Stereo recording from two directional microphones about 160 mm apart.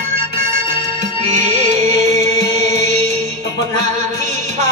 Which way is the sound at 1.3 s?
50° right (ahead or behind).